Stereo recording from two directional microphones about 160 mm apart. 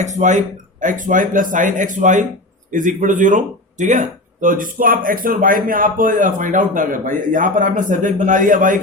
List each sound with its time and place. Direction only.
0.0 s speech: 50° right (ahead or behind)